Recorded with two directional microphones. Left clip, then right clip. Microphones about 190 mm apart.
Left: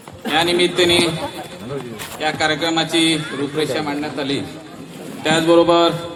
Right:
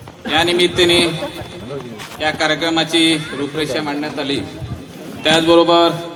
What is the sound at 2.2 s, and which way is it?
A man's voice, 25° right (ahead or behind).